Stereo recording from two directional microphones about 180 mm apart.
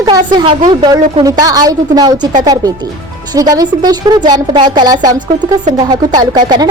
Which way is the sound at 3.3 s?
20° right (ahead or behind).